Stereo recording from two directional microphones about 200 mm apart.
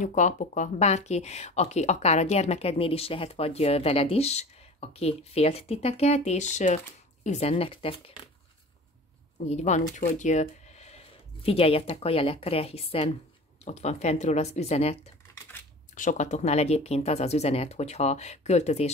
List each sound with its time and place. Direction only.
0.0 s speech: 40° left (ahead or behind)
9.5 s speech: 35° left (ahead or behind)